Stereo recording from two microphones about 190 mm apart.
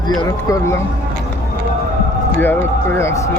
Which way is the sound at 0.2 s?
20° left (ahead or behind).